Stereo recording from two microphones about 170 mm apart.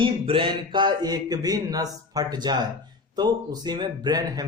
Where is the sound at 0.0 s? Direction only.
30° right (ahead or behind).